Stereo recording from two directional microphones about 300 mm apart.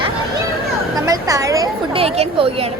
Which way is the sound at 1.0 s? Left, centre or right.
Centre.